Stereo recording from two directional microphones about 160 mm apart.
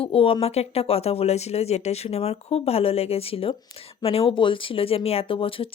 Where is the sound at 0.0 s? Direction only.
35° left (ahead or behind).